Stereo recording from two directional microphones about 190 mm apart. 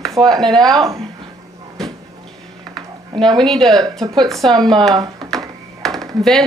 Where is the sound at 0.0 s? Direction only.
Centre (ahead or behind).